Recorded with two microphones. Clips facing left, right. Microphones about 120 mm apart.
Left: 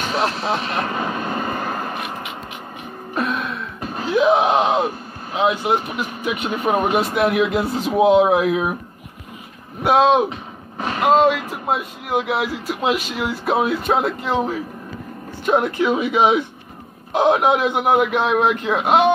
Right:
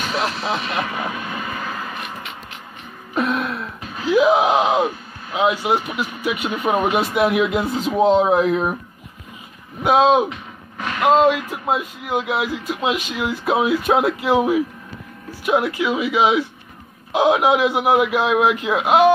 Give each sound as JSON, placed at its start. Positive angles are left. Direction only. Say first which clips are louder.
{"t": 0.0, "sound": "speech", "louder": "left 2 dB", "side_deg": 25}
{"t": 1.1, "sound": "vehicle", "louder": "left 4 dB", "side_deg": 45}
{"t": 3.2, "sound": "throat clearing", "louder": "right 2 dB", "side_deg": 0}
{"t": 3.8, "sound": "wail", "louder": "left 5 dB", "side_deg": 45}
{"t": 4.1, "sound": "a sound", "louder": "right 1 dB", "side_deg": -10}
{"t": 5.9, "sound": "speech", "louder": "right 1 dB", "side_deg": -5}
{"t": 9.8, "sound": "speech", "louder": "even", "side_deg": 0}
{"t": 10.3, "sound": "a sound", "louder": "left 3 dB", "side_deg": 35}
{"t": 11.0, "sound": "speech", "louder": "even", "side_deg": 0}
{"t": 15.8, "sound": "speech", "louder": "left 2 dB", "side_deg": 40}
{"t": 17.1, "sound": "speech", "louder": "even", "side_deg": -5}